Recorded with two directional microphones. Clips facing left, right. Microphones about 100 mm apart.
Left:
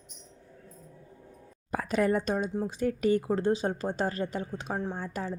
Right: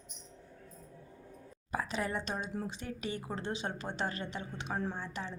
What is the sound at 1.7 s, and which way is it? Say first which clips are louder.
A woman's voice: left 8 dB; 50° left (ahead or behind).